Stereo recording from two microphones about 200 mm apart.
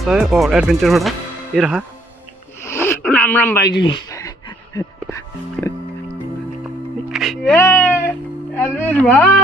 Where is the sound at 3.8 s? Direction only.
25° left (ahead or behind).